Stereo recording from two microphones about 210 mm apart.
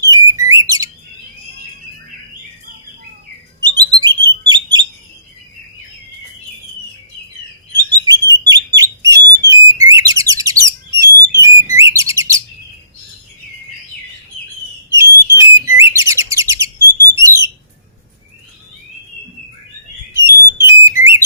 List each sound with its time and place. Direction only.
0.0 s bird: 15° right (ahead or behind)
3.6 s bird: 20° right (ahead or behind)
8.0 s bird: 15° right (ahead or behind)
14.9 s bird: 15° right (ahead or behind)
17.2 s a sound: 15° right (ahead or behind)
20.1 s whistle: 15° right (ahead or behind)